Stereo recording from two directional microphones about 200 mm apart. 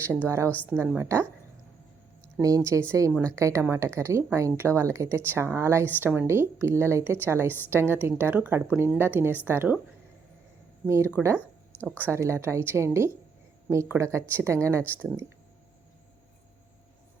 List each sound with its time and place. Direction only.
0.0 s speech: 10° right (ahead or behind)
2.4 s speech: 15° right (ahead or behind)
10.8 s speech: 15° right (ahead or behind)
11.3 s a sound: 10° left (ahead or behind)
12.0 s speech: 15° right (ahead or behind)